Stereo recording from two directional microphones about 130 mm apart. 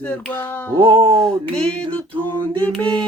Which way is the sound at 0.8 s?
40° right (ahead or behind).